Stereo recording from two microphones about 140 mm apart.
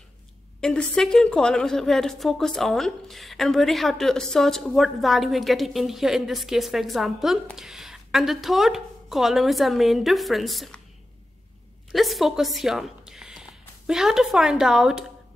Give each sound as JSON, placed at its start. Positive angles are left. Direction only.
{"t": 0.6, "sound": "a woman's voice", "side_deg": 5}
{"t": 11.9, "sound": "a woman's voice", "side_deg": 0}